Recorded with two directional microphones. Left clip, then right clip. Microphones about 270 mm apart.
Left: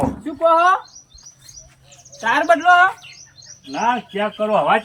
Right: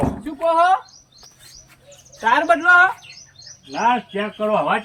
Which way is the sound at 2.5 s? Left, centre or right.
Centre.